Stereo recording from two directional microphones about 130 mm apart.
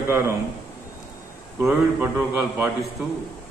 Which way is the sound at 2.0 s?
15° right (ahead or behind).